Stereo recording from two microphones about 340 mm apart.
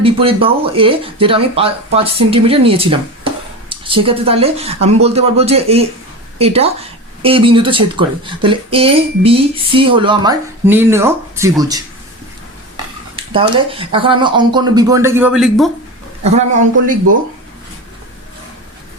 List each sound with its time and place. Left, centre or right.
0.0 s speech: centre
13.1 s speech: centre
16.2 s speech: centre